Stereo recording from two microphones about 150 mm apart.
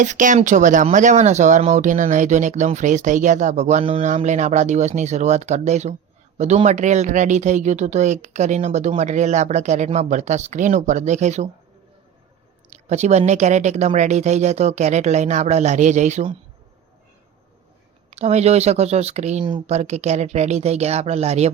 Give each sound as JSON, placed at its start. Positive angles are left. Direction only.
{"t": 0.0, "sound": "speech", "side_deg": -55}
{"t": 12.7, "sound": "speech", "side_deg": -50}
{"t": 18.1, "sound": "speech", "side_deg": -45}